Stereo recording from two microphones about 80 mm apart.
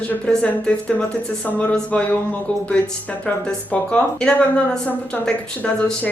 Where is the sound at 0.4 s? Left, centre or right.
Centre.